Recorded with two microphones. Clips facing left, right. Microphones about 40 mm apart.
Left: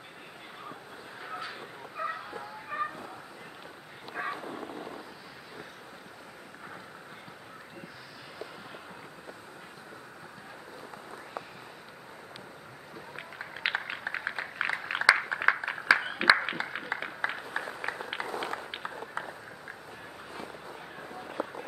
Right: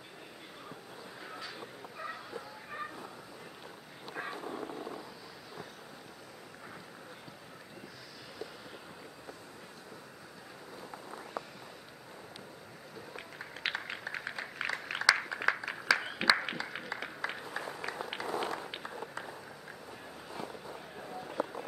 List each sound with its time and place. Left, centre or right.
1.2 s bow-wow: left
4.1 s bow-wow: centre
13.1 s a sound: centre
18.7 s run: left